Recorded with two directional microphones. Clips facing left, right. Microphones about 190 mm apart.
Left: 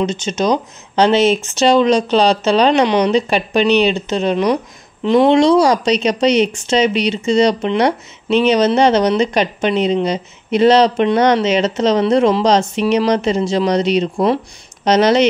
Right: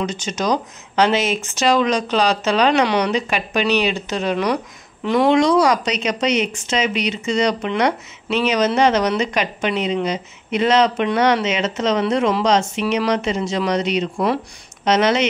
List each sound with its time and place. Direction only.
0.0 s speech: 25° left (ahead or behind)